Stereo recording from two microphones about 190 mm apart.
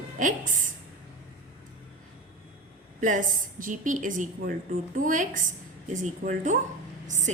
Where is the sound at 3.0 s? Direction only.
40° right (ahead or behind).